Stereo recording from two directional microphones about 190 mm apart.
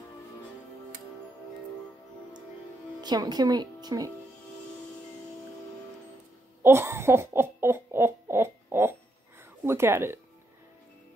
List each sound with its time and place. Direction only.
3.0 s speech: 20° right (ahead or behind)
6.6 s a sound: 10° right (ahead or behind)
9.7 s speech: 15° right (ahead or behind)